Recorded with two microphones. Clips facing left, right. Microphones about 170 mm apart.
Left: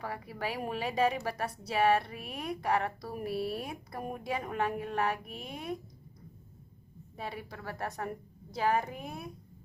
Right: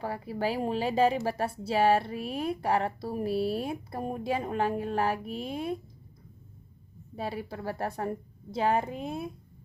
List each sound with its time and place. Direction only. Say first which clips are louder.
0.0 s speech: right 6 dB; 30° right (ahead or behind)
7.2 s a woman's voice: right 6 dB; 30° right (ahead or behind)